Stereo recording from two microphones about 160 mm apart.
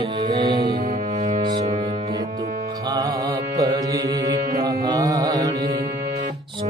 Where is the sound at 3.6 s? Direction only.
25° right (ahead or behind).